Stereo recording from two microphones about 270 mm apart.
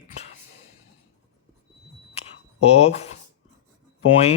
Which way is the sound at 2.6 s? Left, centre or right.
Left.